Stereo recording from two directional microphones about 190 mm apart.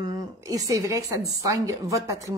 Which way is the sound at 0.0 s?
20° right (ahead or behind).